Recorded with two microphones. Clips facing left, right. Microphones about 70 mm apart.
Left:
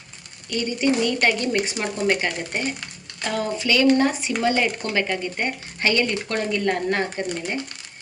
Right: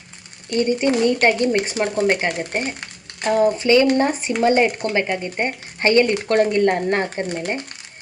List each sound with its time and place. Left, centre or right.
0.5 s speech: right